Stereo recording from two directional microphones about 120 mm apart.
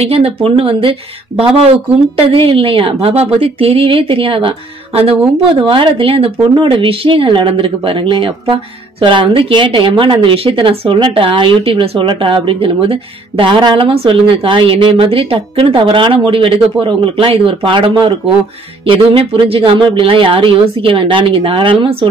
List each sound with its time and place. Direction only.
0.0 s speech: 55° right (ahead or behind)